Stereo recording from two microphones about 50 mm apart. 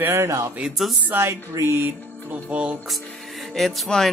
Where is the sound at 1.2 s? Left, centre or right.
Right.